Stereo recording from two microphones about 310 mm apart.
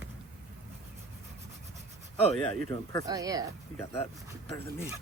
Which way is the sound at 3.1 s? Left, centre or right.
Centre.